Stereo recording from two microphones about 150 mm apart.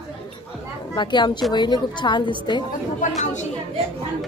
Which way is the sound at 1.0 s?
30° left (ahead or behind).